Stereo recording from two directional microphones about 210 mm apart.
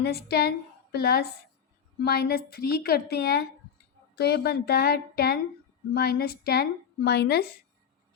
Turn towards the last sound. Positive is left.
turn(degrees=50)  # may be behind; listen again after turning